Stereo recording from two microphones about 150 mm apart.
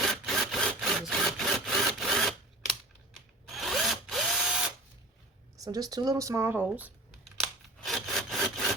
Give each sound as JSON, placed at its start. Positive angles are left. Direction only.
{"t": 0.0, "sound": "wood", "side_deg": 0}
{"t": 3.5, "sound": "drill", "side_deg": 0}
{"t": 5.5, "sound": "speech", "side_deg": -25}
{"t": 7.3, "sound": "sawing", "side_deg": 0}